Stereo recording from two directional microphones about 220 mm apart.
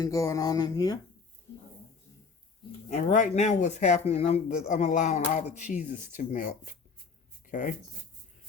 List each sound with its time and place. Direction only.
0.0 s speech: 15° left (ahead or behind)
2.9 s speech: 30° left (ahead or behind)